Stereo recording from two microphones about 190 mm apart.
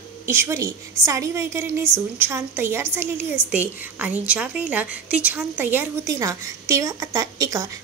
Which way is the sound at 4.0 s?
5° right (ahead or behind).